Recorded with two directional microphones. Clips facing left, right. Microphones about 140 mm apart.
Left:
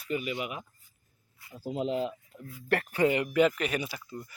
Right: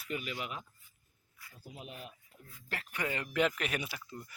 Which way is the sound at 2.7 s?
65° left (ahead or behind).